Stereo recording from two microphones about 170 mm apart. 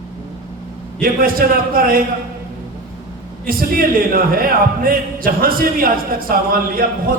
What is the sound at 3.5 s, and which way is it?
Speech, 60° right (ahead or behind).